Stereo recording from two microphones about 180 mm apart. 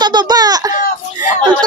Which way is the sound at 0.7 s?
45° left (ahead or behind).